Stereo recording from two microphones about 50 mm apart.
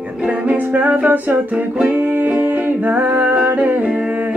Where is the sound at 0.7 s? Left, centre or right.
Right.